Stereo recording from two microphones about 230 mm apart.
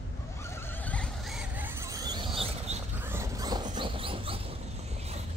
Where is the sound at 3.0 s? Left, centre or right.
Centre.